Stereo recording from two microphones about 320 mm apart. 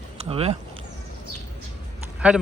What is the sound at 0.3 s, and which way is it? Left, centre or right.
Speech, centre.